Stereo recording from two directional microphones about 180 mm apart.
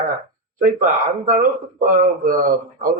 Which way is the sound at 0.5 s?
50° right (ahead or behind).